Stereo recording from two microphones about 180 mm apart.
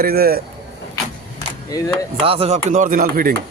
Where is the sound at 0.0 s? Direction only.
55° right (ahead or behind).